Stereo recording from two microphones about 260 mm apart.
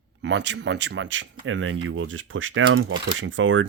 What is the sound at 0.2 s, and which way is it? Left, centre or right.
Speech, right.